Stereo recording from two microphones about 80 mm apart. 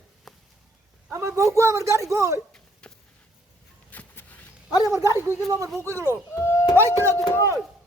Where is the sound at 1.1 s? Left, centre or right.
Right.